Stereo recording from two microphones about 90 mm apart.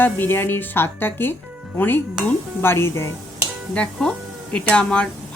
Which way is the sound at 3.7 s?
10° left (ahead or behind).